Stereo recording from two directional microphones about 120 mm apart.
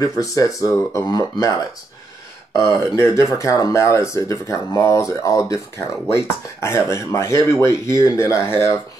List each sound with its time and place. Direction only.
0.0 s speech: 30° left (ahead or behind)